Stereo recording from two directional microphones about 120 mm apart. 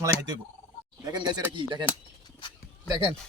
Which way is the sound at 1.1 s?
35° right (ahead or behind).